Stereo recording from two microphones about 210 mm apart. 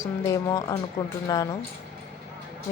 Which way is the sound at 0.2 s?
15° left (ahead or behind).